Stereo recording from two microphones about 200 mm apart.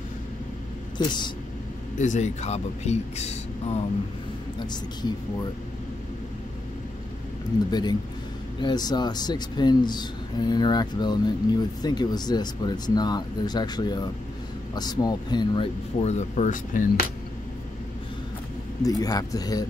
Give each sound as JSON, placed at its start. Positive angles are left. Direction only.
{"t": 0.9, "sound": "speech", "side_deg": 20}
{"t": 2.0, "sound": "speech", "side_deg": 35}
{"t": 7.7, "sound": "speech", "side_deg": 20}
{"t": 18.8, "sound": "speech", "side_deg": 20}